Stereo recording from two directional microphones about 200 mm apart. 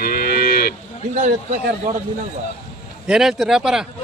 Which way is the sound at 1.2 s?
40° right (ahead or behind).